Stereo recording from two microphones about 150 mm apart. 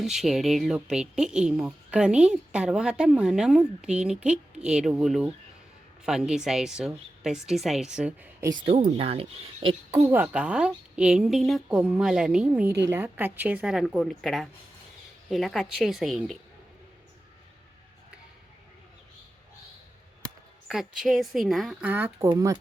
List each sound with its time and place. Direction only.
0.0 s speech: centre (ahead or behind)
8.8 s speech: 45° right (ahead or behind)
10.1 s speech: 10° right (ahead or behind)
20.7 s speech: 5° right (ahead or behind)
21.8 s speech: 15° right (ahead or behind)